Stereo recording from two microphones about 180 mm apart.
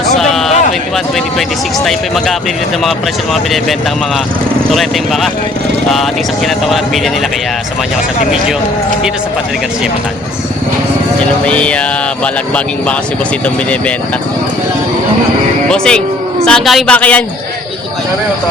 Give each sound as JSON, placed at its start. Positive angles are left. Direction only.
{"t": 0.2, "sound": "a sound", "side_deg": 0}
{"t": 1.4, "sound": "speech", "side_deg": 0}
{"t": 4.7, "sound": "speech", "side_deg": 0}
{"t": 6.7, "sound": "speech", "side_deg": 0}
{"t": 11.4, "sound": "speech", "side_deg": 5}
{"t": 15.7, "sound": "speech", "side_deg": 5}